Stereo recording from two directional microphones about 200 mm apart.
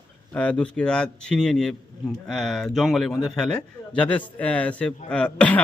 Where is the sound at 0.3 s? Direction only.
5° left (ahead or behind).